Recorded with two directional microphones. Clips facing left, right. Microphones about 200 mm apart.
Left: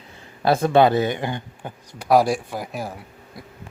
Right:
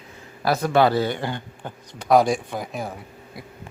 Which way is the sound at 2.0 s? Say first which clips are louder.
Even; 5° left (ahead or behind).